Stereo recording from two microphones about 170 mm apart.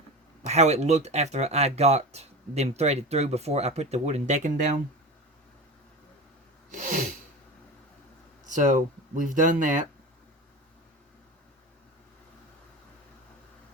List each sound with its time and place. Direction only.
0.4 s speech: 40° right (ahead or behind)
6.7 s sneeze: 50° right (ahead or behind)
8.5 s speech: 50° right (ahead or behind)